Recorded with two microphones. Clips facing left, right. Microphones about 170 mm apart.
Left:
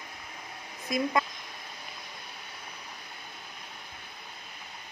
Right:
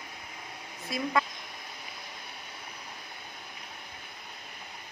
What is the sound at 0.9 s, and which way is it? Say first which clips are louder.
Speech: left 2 dB; 15° left (ahead or behind).